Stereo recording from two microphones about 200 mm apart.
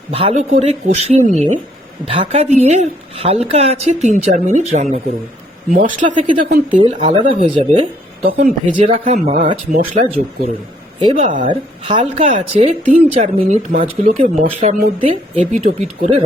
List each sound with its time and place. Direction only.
0.1 s speech: 30° right (ahead or behind)
6.7 s speech: 25° right (ahead or behind)
8.2 s speech: 45° right (ahead or behind)
8.7 s speech: 30° right (ahead or behind)
11.0 s speech: 25° right (ahead or behind)
11.3 s speech: 40° right (ahead or behind)
11.8 s speech: 30° right (ahead or behind)